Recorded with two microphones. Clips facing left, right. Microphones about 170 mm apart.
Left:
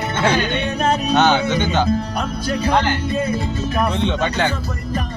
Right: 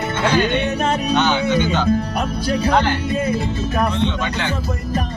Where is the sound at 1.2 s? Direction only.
50° left (ahead or behind).